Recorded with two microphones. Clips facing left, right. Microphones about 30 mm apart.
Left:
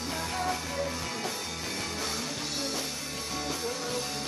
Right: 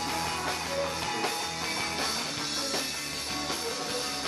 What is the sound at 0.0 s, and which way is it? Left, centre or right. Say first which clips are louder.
Music: right 1 dB; right.